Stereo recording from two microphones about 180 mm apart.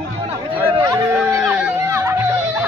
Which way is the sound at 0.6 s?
15° right (ahead or behind).